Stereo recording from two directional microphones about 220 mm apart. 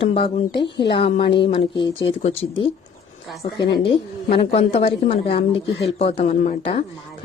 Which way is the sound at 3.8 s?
25° left (ahead or behind).